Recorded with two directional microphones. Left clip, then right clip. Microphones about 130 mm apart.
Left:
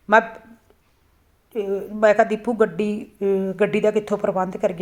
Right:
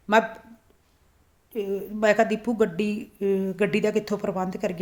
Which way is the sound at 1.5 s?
30° right (ahead or behind).